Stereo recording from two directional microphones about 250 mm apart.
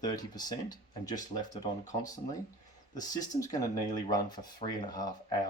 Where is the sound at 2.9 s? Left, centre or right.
Centre.